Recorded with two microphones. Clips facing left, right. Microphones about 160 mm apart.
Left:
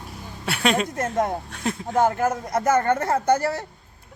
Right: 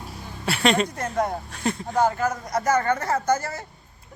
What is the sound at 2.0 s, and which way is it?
Speech, 50° left (ahead or behind).